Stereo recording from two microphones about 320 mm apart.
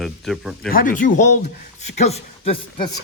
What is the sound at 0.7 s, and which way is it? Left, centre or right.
Speech, left.